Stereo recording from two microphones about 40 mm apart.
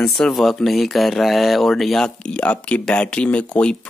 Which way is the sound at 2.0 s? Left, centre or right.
Left.